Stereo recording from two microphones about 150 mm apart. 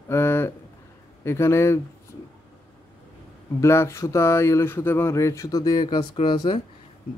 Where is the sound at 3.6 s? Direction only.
20° left (ahead or behind).